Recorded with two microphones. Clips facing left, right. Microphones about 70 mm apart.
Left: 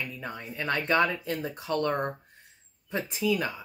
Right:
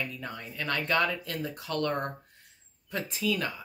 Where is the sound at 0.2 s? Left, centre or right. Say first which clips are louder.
Left 2 dB; centre.